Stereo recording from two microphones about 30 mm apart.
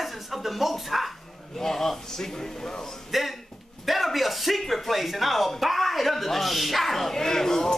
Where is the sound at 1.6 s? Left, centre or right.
Centre.